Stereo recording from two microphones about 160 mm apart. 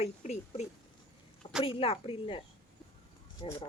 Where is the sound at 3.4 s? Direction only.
35° left (ahead or behind).